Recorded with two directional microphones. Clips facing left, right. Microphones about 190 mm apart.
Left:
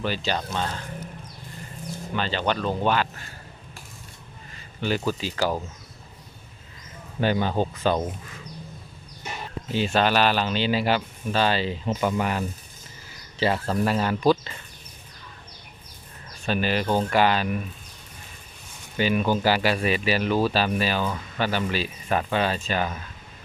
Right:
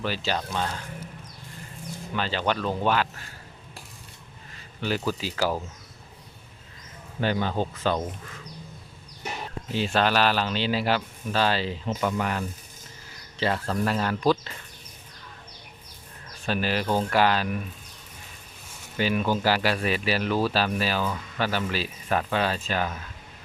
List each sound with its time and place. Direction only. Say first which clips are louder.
0.0 s speech: left 1 dB; 5° right (ahead or behind)
2.1 s speech: left 1 dB; 5° right (ahead or behind)
4.8 s speech: left 2 dB; centre (ahead or behind)
7.2 s speech: left 3 dB; 15° left (ahead or behind)
9.7 s speech: left 2 dB; centre (ahead or behind)
11.9 s speech: left 2 dB; 10° left (ahead or behind)
16.5 s speech: left 2 dB; centre (ahead or behind)
18.9 s speech: left 2 dB; centre (ahead or behind)